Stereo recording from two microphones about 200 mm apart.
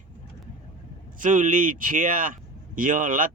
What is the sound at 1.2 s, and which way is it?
Speech, 40° right (ahead or behind).